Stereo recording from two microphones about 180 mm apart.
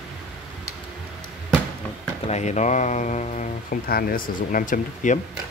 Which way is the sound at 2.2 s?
40° left (ahead or behind).